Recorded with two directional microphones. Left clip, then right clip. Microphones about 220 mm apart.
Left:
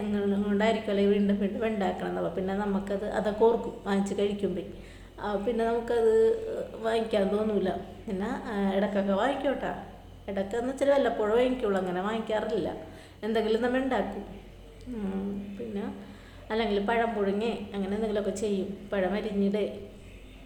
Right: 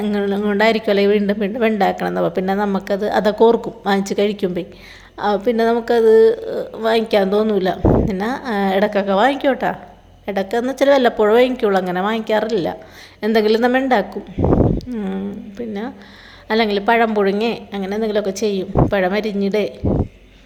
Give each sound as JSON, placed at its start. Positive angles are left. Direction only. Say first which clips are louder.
{"t": 0.0, "sound": "a woman's voice", "louder": "right 11 dB", "side_deg": -40}
{"t": 16.5, "sound": "a woman's voice", "louder": "right 12 dB", "side_deg": -40}